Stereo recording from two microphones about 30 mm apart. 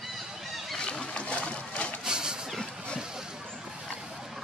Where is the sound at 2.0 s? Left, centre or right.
Right.